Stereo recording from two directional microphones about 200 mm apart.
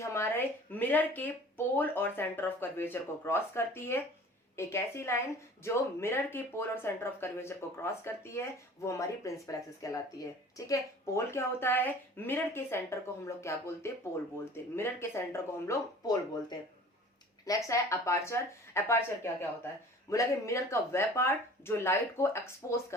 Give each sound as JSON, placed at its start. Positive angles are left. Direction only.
{"t": 0.0, "sound": "speech", "side_deg": 15}